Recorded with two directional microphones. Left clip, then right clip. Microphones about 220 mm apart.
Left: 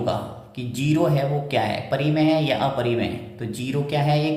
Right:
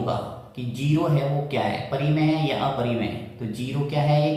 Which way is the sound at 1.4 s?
55° left (ahead or behind).